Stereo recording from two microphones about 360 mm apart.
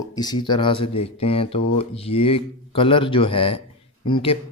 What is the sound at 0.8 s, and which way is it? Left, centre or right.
Speech, left.